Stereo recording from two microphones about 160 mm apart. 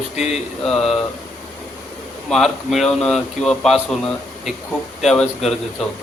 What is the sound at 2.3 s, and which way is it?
A man's voice, centre (ahead or behind).